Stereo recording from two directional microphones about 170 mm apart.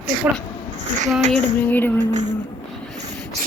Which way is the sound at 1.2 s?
40° right (ahead or behind).